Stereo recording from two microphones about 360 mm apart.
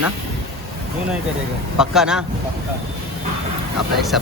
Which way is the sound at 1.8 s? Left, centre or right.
Centre.